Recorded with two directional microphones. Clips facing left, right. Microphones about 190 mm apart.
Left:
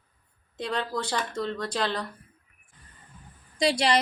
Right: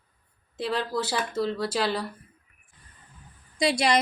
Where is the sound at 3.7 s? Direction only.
10° right (ahead or behind).